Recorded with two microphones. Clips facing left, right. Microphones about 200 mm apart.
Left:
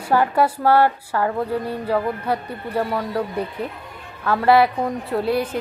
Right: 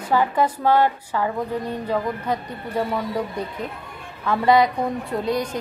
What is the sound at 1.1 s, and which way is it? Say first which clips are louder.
A woman's voice: left 3 dB; 10° left (ahead or behind).